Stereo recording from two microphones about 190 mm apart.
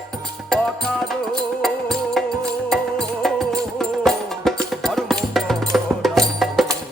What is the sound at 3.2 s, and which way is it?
Music, centre (ahead or behind).